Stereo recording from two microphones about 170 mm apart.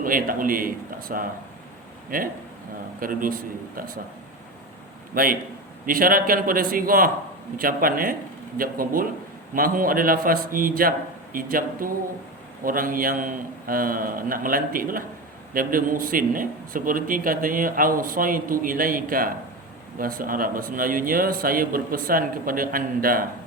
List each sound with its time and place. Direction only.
0.0 s a man's voice: 55° right (ahead or behind)
5.1 s a man's voice: 55° right (ahead or behind)